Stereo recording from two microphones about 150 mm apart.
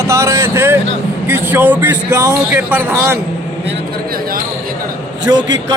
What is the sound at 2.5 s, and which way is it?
Speech, 15° right (ahead or behind).